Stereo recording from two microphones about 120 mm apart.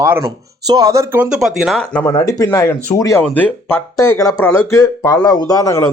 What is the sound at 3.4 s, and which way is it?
Speech, 15° left (ahead or behind).